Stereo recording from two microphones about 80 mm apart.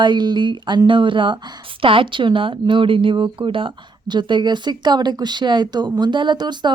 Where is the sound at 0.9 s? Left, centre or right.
Right.